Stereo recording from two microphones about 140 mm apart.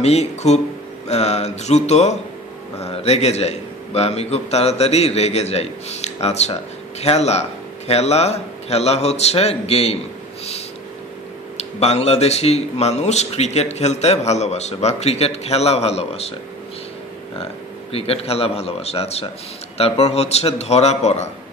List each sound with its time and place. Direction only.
0.0 s a man's voice: 50° left (ahead or behind)
11.5 s a man's voice: 50° left (ahead or behind)
17.9 s a man's voice: 45° left (ahead or behind)